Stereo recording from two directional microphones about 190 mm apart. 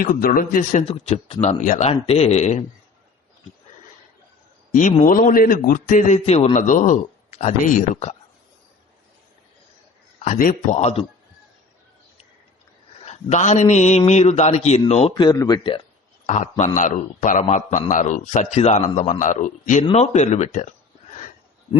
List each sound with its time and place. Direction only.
0.0 s a man's voice: 50° left (ahead or behind)
4.7 s a man's voice: 40° left (ahead or behind)
6.1 s a man's voice: 35° left (ahead or behind)
10.2 s a man's voice: 40° left (ahead or behind)
13.0 s a man's voice: 35° left (ahead or behind)
15.1 s speech: 20° left (ahead or behind)
16.2 s a man's voice: 40° left (ahead or behind)